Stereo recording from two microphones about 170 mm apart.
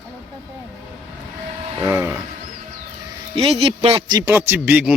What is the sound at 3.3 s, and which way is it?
Speech, 35° right (ahead or behind).